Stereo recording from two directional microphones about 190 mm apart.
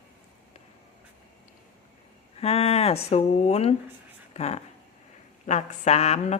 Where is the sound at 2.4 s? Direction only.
30° left (ahead or behind).